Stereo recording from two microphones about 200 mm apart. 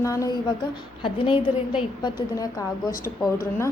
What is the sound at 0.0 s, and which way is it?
A woman's voice, 15° left (ahead or behind).